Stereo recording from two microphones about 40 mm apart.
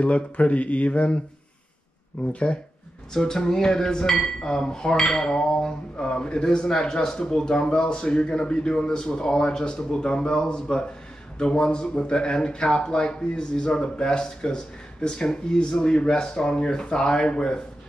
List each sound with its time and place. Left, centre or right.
0.0 s speech: left
2.2 s speech: left
3.1 s speech: centre